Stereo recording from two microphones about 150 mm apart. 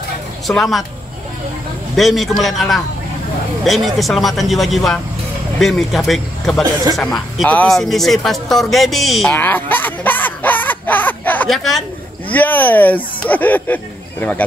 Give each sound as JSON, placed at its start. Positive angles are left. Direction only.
{"t": 0.5, "sound": "speech", "side_deg": 0}
{"t": 2.0, "sound": "speech", "side_deg": 0}
{"t": 9.3, "sound": "a sound", "side_deg": 10}
{"t": 11.4, "sound": "speech", "side_deg": 0}